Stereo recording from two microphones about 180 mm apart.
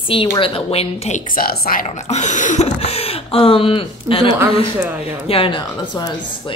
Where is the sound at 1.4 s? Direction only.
55° left (ahead or behind).